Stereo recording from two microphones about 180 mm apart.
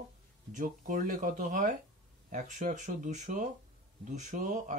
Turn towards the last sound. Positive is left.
turn(degrees=-45)  # may be behind; listen again after turning